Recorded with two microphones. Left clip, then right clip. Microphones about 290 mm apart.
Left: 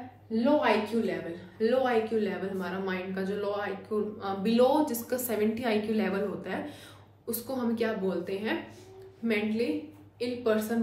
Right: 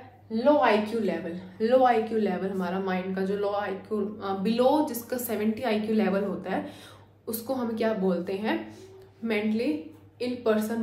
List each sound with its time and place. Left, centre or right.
0.6 s speech: right